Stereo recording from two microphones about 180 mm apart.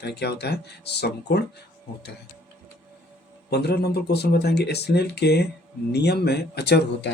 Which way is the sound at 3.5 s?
65° left (ahead or behind).